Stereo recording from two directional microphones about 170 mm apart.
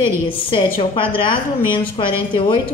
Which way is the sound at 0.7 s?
30° left (ahead or behind).